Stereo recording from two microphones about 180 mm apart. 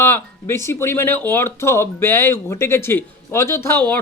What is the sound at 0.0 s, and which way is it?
Speech, 15° left (ahead or behind).